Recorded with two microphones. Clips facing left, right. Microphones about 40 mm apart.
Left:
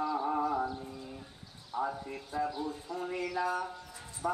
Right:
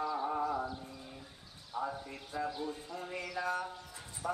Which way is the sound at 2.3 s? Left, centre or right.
Centre.